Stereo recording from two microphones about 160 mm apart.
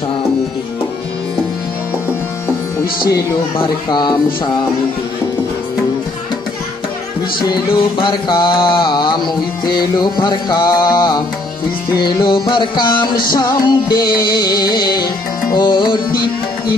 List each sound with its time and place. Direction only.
3.5 s speech: 30° left (ahead or behind)
7.4 s speech: 30° left (ahead or behind)